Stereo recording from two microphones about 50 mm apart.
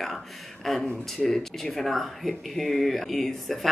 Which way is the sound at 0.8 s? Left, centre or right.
Centre.